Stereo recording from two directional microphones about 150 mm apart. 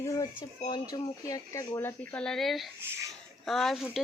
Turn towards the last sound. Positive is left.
turn(degrees=0)  # may be behind; listen again after turning